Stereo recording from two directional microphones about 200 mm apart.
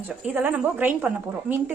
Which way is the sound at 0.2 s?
5° right (ahead or behind).